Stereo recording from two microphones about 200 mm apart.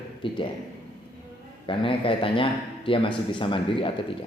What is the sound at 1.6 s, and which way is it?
Speech, 25° left (ahead or behind).